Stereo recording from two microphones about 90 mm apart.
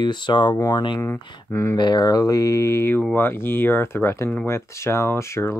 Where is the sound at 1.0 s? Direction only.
30° left (ahead or behind).